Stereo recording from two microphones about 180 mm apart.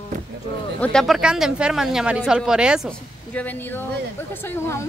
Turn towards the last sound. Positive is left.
turn(degrees=15)  # may be behind; listen again after turning